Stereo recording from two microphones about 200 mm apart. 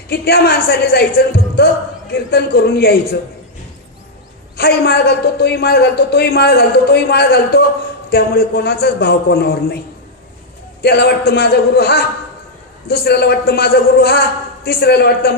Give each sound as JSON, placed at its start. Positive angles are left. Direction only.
{"t": 0.1, "sound": "speech", "side_deg": 50}
{"t": 4.5, "sound": "speech", "side_deg": 50}
{"t": 10.8, "sound": "speech", "side_deg": 50}